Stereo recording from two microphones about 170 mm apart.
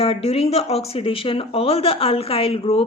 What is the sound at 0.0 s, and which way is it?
Speech, 35° left (ahead or behind).